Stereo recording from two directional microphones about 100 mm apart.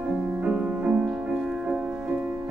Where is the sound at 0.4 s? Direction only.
10° right (ahead or behind).